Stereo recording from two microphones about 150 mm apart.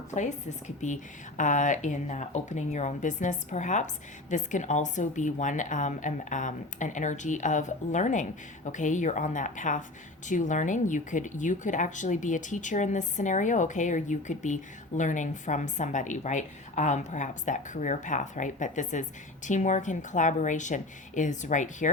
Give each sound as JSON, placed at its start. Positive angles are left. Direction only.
{"t": 0.1, "sound": "speech", "side_deg": 55}